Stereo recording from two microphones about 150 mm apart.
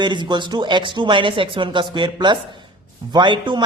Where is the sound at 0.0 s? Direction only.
30° right (ahead or behind).